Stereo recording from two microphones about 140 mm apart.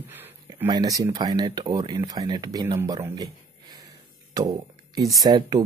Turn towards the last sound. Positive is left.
turn(degrees=-30)  # may be behind; listen again after turning